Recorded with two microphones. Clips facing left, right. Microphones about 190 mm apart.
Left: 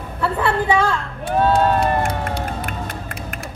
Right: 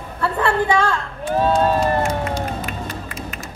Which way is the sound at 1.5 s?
60° left (ahead or behind).